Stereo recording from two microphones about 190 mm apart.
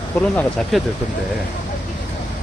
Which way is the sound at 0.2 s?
5° left (ahead or behind).